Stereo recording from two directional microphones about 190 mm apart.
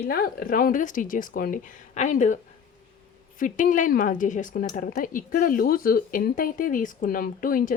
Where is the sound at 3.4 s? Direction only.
45° left (ahead or behind).